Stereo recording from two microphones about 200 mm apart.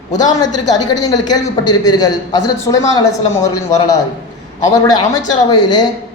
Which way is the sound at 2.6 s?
15° left (ahead or behind).